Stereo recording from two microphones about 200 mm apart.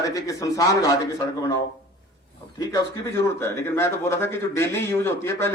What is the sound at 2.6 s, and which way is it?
A man's voice, 10° left (ahead or behind).